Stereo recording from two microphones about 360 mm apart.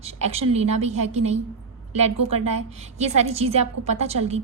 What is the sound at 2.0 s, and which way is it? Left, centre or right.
A woman's voice, centre.